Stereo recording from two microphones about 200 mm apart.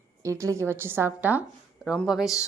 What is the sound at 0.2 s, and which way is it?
A woman's voice, 15° right (ahead or behind).